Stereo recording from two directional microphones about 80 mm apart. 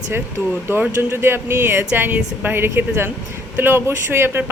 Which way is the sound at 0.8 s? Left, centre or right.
Right.